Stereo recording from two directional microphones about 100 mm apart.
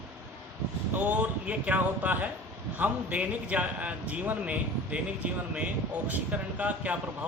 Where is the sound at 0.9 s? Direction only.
15° right (ahead or behind).